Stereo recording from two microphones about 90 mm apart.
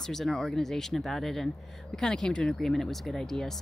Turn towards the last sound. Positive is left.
turn(degrees=5)  # may be behind; listen again after turning